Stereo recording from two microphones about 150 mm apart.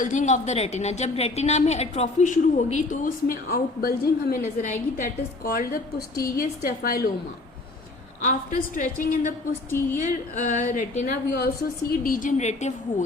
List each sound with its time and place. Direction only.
0.0 s a woman's voice: 55° left (ahead or behind); by 4.4 s 90° left
4.6 s a woman's voice: 60° left (ahead or behind); by 7.0 s 80° left
8.2 s a woman's voice: 60° left (ahead or behind)
9.6 s speech: 15° left (ahead or behind)
10.0 s a woman's voice: 55° left (ahead or behind)